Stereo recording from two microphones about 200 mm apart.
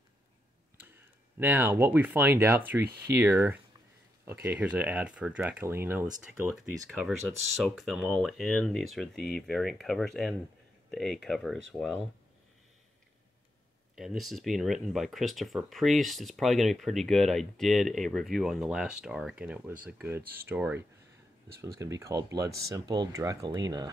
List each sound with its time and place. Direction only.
1.4 s speech: 10° right (ahead or behind)
6.5 s speech: centre (ahead or behind)
13.9 s speech: centre (ahead or behind); by 23.9 s 20° right (ahead or behind)